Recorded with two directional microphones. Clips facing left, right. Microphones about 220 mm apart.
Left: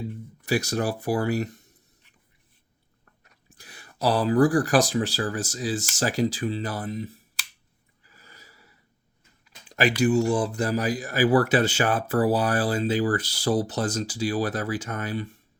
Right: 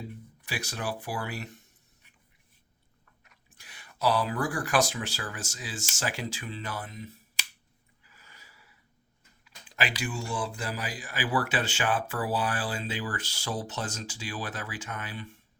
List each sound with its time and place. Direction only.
0.4 s speech: 40° left (ahead or behind)
3.2 s speech: 35° left (ahead or behind)
8.0 s a sound: 40° left (ahead or behind)
9.4 s speech: 45° left (ahead or behind)